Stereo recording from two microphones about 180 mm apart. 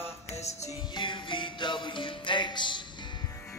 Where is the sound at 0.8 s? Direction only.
25° left (ahead or behind).